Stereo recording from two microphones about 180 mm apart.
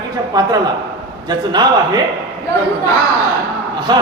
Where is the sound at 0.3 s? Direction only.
20° right (ahead or behind).